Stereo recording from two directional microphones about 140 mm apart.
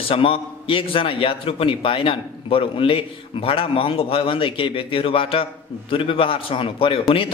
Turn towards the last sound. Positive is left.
turn(degrees=40)  # may be behind; listen again after turning